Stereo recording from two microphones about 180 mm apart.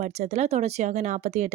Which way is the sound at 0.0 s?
35° right (ahead or behind).